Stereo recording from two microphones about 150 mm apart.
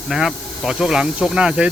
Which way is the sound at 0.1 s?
Centre (ahead or behind).